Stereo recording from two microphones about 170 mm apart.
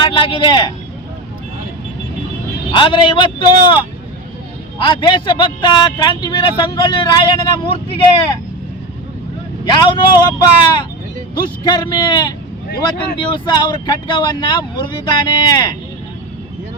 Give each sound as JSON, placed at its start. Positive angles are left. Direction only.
{"t": 0.0, "sound": "a man's voice", "side_deg": 30}
{"t": 2.7, "sound": "a man's voice", "side_deg": 30}
{"t": 4.8, "sound": "a man's voice", "side_deg": 30}
{"t": 9.6, "sound": "a man's voice", "side_deg": 25}
{"t": 12.6, "sound": "speech", "side_deg": 60}
{"t": 13.1, "sound": "a man's voice", "side_deg": 25}